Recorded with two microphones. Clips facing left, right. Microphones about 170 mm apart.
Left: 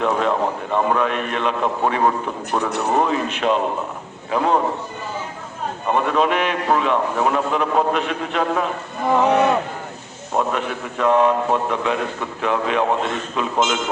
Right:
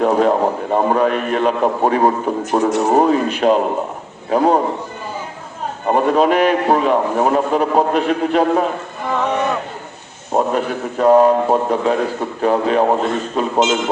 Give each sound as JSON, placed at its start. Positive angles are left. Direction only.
{"t": 0.0, "sound": "a man's voice", "side_deg": -40}
{"t": 5.9, "sound": "a man's voice", "side_deg": -40}
{"t": 10.3, "sound": "a man's voice", "side_deg": -40}